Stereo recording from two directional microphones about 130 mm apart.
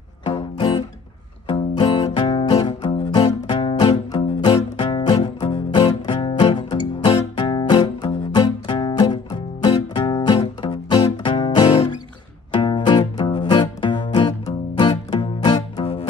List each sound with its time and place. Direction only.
0.2 s music: 40° left (ahead or behind)